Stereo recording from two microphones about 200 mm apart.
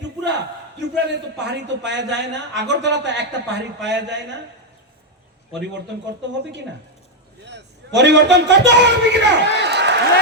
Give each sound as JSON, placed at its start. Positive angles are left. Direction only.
{"t": 0.3, "sound": "a man's voice", "side_deg": -60}
{"t": 7.4, "sound": "a man's voice", "side_deg": -60}